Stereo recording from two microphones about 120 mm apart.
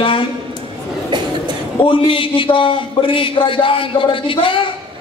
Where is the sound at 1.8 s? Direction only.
45° left (ahead or behind).